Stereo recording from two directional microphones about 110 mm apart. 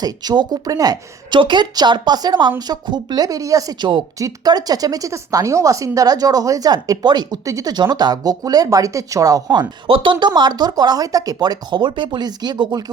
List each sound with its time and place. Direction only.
0.0 s speech: 35° right (ahead or behind)